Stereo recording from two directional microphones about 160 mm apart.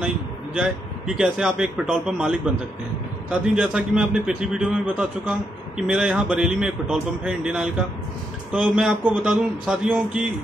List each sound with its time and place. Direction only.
0.6 s a man's voice: 5° right (ahead or behind)